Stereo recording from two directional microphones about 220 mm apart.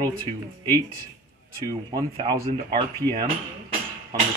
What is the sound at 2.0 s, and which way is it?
Speech, 25° right (ahead or behind).